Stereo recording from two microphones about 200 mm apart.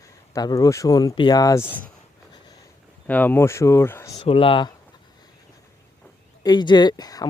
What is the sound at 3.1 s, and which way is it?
Speech, 10° left (ahead or behind).